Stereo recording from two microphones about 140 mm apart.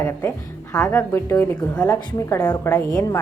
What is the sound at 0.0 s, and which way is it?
A woman's voice, 20° left (ahead or behind).